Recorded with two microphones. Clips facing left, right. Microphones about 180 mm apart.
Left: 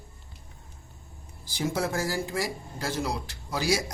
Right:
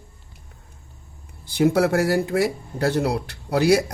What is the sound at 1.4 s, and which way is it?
Speech, 60° right (ahead or behind).